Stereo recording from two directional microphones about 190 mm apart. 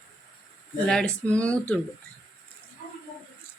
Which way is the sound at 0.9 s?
5° left (ahead or behind).